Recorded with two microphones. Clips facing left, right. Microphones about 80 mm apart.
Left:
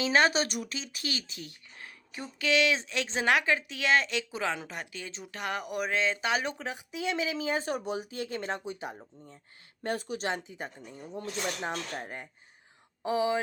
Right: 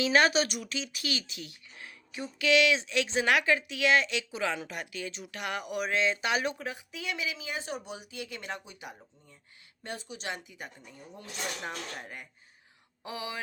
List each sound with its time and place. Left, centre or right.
0.0 s speech: left
9.8 s speech: left